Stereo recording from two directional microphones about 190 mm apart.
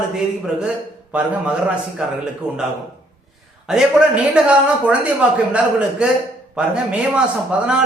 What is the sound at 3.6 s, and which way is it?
A man's voice, centre (ahead or behind).